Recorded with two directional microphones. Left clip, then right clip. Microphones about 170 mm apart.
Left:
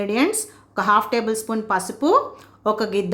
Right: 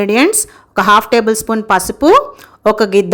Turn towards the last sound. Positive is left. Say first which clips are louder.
# right 10 dB
turn(degrees=-45)  # may be behind; listen again after turning